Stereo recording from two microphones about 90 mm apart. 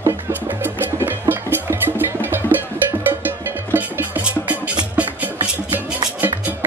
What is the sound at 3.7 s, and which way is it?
Music, 20° right (ahead or behind).